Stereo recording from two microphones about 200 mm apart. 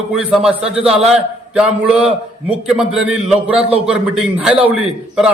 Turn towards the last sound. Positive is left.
turn(degrees=-5)  # may be behind; listen again after turning